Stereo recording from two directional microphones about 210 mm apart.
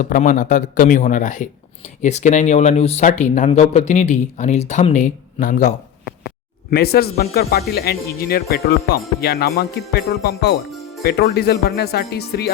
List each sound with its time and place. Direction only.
0.0 s speech: 40° left (ahead or behind)
10.7 s music: centre (ahead or behind)
11.0 s speech: 50° left (ahead or behind)